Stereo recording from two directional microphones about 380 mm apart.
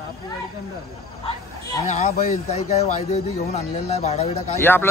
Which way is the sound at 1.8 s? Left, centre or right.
Centre.